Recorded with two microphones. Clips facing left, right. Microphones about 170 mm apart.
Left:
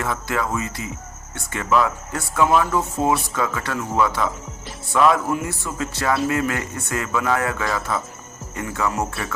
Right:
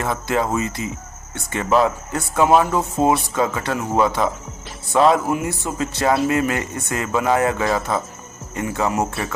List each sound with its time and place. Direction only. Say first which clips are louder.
0.0 s speech: right 3 dB; 25° right (ahead or behind)
5.3 s speech: right 3 dB; 20° right (ahead or behind)